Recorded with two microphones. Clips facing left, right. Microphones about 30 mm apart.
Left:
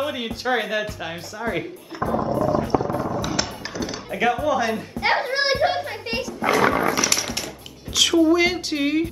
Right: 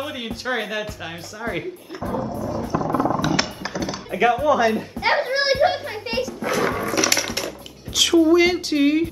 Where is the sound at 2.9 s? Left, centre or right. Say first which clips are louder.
Right 4 dB; right.